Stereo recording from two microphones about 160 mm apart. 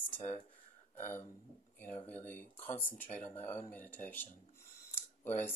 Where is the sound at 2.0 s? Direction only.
10° left (ahead or behind).